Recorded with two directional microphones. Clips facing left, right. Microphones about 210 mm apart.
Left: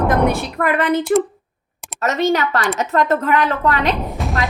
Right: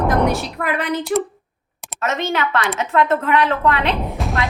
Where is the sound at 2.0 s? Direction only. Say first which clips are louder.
Left 4 dB; 40° left (ahead or behind).